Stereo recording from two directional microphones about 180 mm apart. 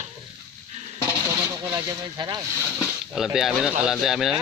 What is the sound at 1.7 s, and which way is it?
Speech, 20° right (ahead or behind).